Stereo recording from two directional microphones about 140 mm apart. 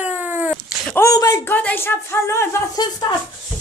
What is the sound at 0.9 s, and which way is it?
Speech, 20° left (ahead or behind).